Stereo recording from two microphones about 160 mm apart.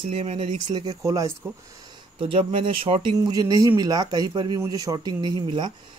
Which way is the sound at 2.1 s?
35° right (ahead or behind).